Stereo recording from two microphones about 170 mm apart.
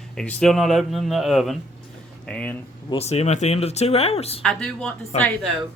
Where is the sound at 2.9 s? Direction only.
40° left (ahead or behind).